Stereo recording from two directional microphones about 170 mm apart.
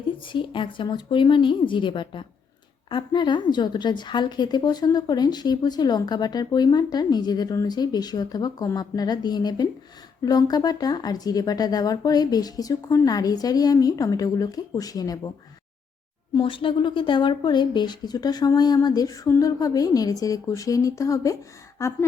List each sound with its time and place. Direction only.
0.3 s a woman's voice: 30° left (ahead or behind)
16.3 s a woman's voice: 30° left (ahead or behind)